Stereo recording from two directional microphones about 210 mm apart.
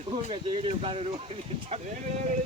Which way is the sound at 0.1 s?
30° right (ahead or behind).